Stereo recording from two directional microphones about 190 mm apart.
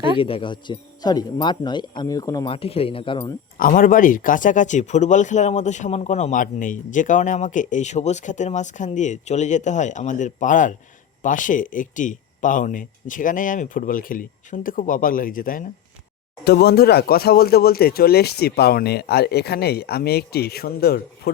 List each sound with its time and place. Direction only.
0.2 s speech: 30° left (ahead or behind)
3.6 s speech: 45° left (ahead or behind)
16.4 s speech: 60° left (ahead or behind)